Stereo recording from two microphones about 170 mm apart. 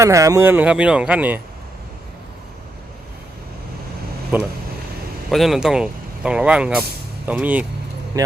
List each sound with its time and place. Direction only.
0.0 s speech: 20° right (ahead or behind)
4.3 s speech: 10° right (ahead or behind)
8.1 s speech: 20° right (ahead or behind)